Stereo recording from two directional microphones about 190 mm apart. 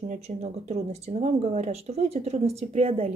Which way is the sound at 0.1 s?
35° right (ahead or behind).